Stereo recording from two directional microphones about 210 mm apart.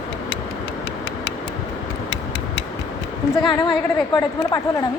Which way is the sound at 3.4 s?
20° left (ahead or behind).